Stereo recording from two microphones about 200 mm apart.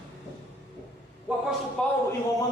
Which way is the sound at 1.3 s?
5° right (ahead or behind).